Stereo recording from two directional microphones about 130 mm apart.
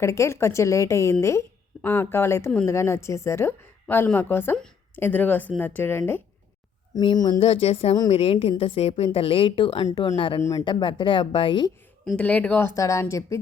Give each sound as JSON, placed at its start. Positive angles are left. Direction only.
{"t": 0.0, "sound": "a woman's voice", "side_deg": 20}
{"t": 6.9, "sound": "speech", "side_deg": 35}
{"t": 7.4, "sound": "a woman's voice", "side_deg": 50}
{"t": 9.1, "sound": "a woman's voice", "side_deg": 45}
{"t": 12.1, "sound": "a woman's voice", "side_deg": 10}